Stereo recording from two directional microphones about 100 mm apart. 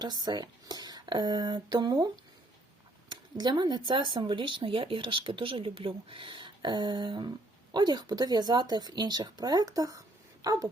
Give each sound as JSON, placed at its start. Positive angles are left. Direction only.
{"t": 0.0, "sound": "speech", "side_deg": -45}
{"t": 3.1, "sound": "speech", "side_deg": -45}